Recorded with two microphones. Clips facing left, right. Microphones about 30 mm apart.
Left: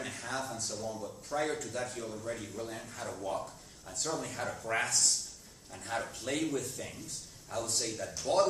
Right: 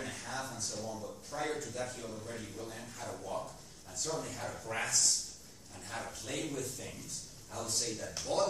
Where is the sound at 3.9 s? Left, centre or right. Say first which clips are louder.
Left 3 dB; left.